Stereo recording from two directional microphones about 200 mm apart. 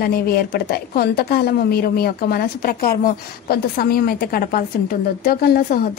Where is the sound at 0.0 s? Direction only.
50° left (ahead or behind).